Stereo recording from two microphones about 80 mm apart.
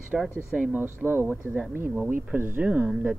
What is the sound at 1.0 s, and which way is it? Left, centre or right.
Speech, right.